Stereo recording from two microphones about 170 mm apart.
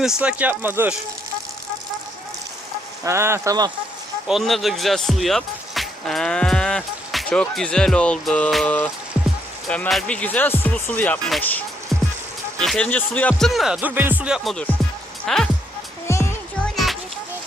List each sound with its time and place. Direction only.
0.0 s speech: 5° right (ahead or behind)
3.0 s speech: 15° right (ahead or behind)
4.3 s speech: centre (ahead or behind)
16.1 s music: 15° left (ahead or behind)
16.7 s music: centre (ahead or behind)